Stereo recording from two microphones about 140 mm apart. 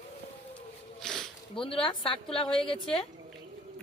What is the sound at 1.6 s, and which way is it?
A woman's voice, 40° left (ahead or behind).